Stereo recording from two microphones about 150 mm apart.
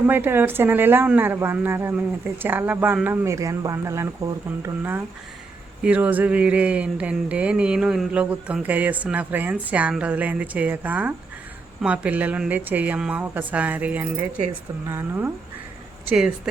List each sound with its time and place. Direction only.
0.1 s speech: 15° right (ahead or behind)